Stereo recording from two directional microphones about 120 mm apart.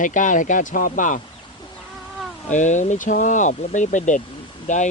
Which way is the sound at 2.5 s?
90° left.